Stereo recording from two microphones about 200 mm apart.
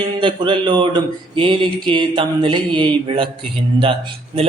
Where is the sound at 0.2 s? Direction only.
25° right (ahead or behind).